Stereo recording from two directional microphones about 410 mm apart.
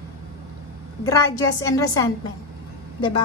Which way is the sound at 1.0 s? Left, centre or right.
Centre.